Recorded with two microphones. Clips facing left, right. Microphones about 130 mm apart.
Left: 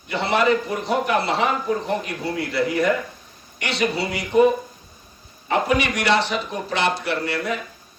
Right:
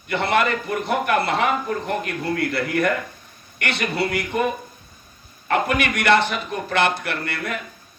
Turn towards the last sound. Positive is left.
turn(degrees=-55)  # may be behind; listen again after turning